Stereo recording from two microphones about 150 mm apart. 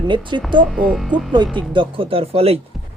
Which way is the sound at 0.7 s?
5° right (ahead or behind).